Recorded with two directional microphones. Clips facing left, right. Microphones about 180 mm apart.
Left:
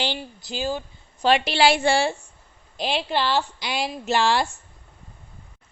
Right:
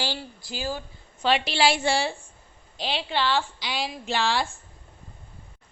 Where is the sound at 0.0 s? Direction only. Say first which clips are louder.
Left 3 dB; 20° left (ahead or behind).